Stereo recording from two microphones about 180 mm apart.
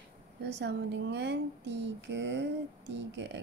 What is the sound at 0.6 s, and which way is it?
Speech, 70° right (ahead or behind).